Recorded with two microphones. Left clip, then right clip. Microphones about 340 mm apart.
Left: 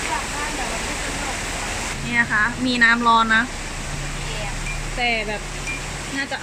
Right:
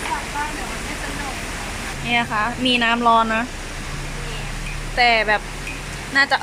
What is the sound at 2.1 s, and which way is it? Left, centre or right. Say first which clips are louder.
Speech: left 1 dB; centre.